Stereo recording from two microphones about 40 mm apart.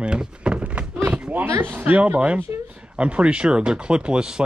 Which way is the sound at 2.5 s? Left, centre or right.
Right.